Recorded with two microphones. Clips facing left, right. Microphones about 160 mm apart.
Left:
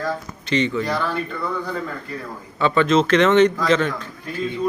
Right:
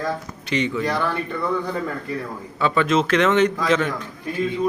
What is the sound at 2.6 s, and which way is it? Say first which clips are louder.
Speech: left 2 dB; 5° right (ahead or behind).